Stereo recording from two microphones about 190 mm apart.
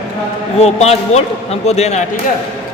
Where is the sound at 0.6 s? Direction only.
35° left (ahead or behind).